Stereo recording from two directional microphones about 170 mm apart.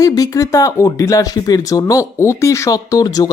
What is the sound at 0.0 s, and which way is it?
Speech, 20° left (ahead or behind).